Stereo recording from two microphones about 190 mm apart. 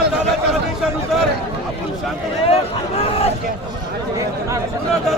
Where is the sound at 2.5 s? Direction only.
30° left (ahead or behind).